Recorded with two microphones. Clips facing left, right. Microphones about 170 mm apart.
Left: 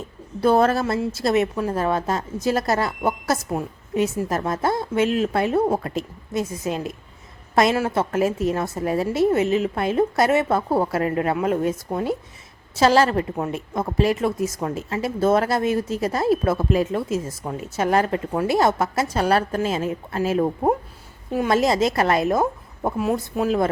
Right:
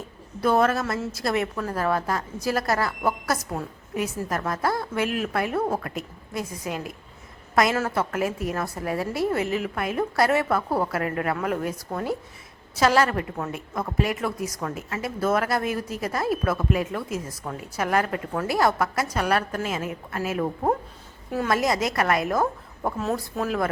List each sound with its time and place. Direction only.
0.4 s a woman's voice: 30° left (ahead or behind)